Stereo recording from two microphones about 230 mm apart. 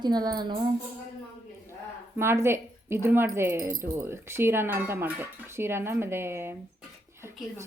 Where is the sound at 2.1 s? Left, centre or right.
Centre.